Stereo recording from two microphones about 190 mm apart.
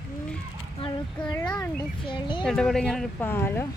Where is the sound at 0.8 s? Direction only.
25° left (ahead or behind).